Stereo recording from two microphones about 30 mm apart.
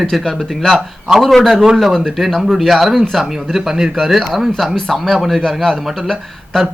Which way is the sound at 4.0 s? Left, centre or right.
Centre.